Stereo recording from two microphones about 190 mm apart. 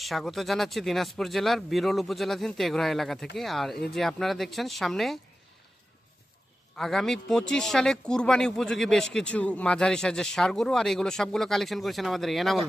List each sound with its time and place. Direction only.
0.0 s speech: centre (ahead or behind)
6.7 s speech: centre (ahead or behind)